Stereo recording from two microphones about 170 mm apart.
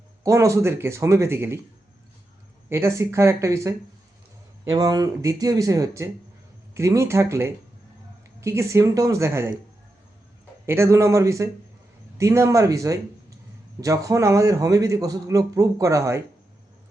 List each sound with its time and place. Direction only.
0.2 s speech: 15° right (ahead or behind)
2.6 s a man's voice: 15° right (ahead or behind)
10.7 s a man's voice: 15° right (ahead or behind)